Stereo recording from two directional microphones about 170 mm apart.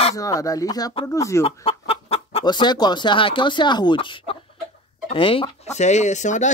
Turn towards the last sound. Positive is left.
turn(degrees=45)  # may be behind; listen again after turning